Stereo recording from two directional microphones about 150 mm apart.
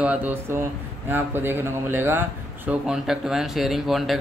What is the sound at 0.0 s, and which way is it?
Speech, 10° right (ahead or behind).